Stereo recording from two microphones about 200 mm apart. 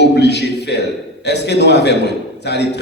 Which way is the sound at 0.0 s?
60° left (ahead or behind).